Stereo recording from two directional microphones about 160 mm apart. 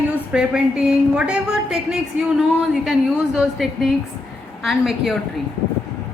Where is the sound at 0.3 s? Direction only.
5° right (ahead or behind).